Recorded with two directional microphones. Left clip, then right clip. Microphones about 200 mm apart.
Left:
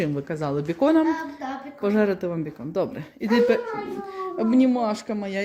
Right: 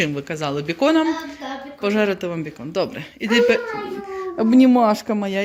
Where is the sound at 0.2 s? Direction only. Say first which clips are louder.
Right 2 dB; 15° left (ahead or behind).